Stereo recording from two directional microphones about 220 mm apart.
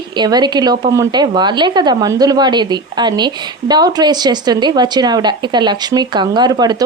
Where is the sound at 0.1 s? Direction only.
20° right (ahead or behind).